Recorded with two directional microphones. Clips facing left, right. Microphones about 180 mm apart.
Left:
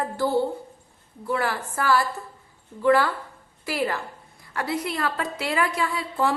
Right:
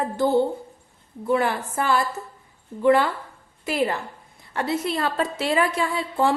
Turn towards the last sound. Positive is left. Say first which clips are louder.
# right 2 dB
turn(degrees=-25)  # may be behind; listen again after turning